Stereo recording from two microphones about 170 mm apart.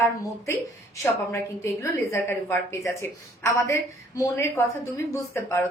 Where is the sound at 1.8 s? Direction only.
15° left (ahead or behind).